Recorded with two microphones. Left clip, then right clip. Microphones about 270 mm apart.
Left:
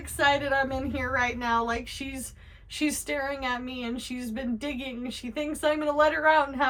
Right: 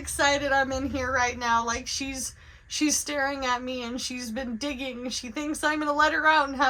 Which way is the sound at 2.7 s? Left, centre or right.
Centre.